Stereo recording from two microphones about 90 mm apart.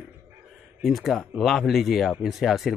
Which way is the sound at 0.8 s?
Centre (ahead or behind).